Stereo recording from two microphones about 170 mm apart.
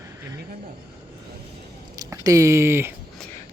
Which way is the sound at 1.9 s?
20° right (ahead or behind).